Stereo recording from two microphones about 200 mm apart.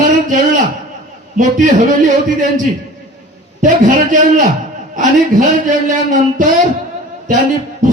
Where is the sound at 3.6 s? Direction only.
40° right (ahead or behind).